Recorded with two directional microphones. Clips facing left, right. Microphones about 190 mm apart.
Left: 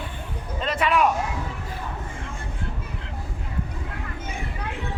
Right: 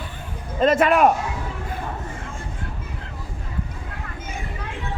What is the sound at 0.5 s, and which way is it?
Speech, 45° right (ahead or behind).